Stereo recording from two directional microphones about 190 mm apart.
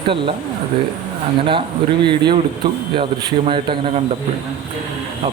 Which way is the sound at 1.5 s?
25° right (ahead or behind).